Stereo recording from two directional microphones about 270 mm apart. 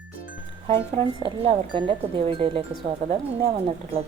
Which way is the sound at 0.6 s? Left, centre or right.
Right.